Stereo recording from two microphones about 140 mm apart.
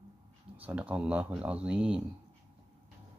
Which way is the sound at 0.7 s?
10° right (ahead or behind).